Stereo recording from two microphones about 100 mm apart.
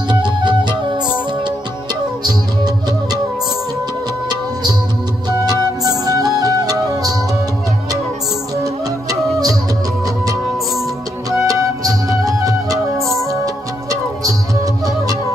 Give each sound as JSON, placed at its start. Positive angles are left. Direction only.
{"t": 0.1, "sound": "music", "side_deg": -50}
{"t": 2.2, "sound": "music", "side_deg": -40}
{"t": 5.4, "sound": "music", "side_deg": -40}
{"t": 11.2, "sound": "music", "side_deg": -35}